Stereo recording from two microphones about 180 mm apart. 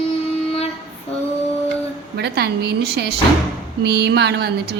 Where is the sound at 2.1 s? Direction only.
65° right (ahead or behind).